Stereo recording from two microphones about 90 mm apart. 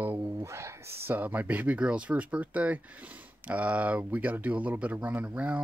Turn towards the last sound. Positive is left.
turn(degrees=-15)  # may be behind; listen again after turning